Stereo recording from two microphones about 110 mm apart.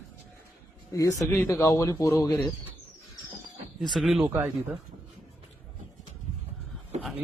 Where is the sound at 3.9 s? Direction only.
Centre (ahead or behind).